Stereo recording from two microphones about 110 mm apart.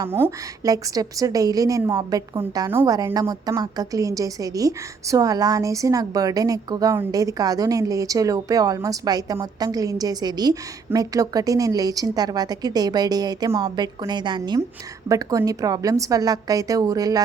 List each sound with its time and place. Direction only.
0.0 s a woman's voice: 25° right (ahead or behind); by 14.6 s 45° right (ahead or behind)
15.1 s a woman's voice: 30° right (ahead or behind)